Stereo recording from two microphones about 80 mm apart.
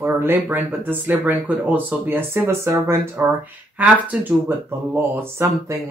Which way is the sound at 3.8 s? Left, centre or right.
Centre.